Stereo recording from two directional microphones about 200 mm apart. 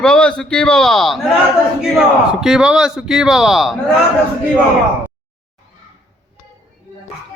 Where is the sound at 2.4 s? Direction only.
5° right (ahead or behind).